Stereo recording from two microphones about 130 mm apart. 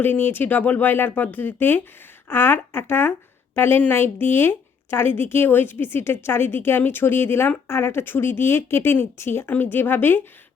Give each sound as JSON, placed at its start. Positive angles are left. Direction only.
{"t": 0.0, "sound": "speech", "side_deg": 15}